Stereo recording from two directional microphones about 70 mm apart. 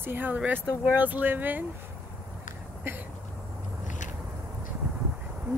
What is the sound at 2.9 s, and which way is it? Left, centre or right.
Speech, right.